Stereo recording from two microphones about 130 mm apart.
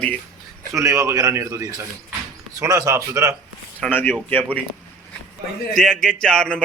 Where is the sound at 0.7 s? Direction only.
25° right (ahead or behind).